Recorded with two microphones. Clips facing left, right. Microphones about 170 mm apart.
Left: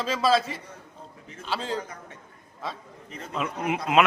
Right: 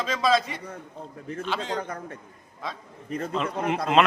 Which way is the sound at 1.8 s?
60° right (ahead or behind).